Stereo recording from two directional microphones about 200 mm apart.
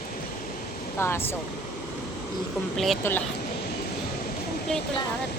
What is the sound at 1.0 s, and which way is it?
Speech, 10° left (ahead or behind).